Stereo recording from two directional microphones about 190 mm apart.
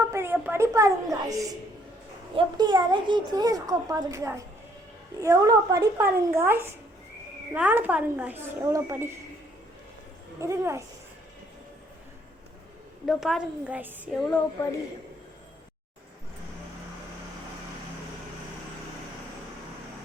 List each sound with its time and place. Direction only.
0.1 s a woman's voice: 10° right (ahead or behind)
10.4 s a woman's voice: 15° right (ahead or behind)
13.1 s speech: centre (ahead or behind)